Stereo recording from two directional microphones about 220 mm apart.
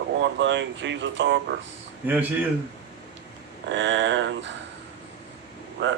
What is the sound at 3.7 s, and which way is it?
Speech, 55° right (ahead or behind).